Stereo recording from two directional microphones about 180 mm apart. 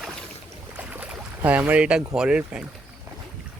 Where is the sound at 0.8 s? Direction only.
10° right (ahead or behind).